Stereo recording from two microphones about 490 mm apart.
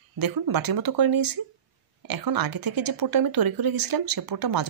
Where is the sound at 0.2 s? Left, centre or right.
Right.